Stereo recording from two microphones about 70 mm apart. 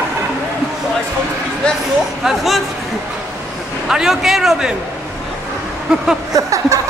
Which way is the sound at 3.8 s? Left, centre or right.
Centre.